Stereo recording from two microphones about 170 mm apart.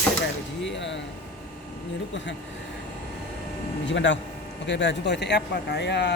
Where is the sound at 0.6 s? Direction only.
90° left.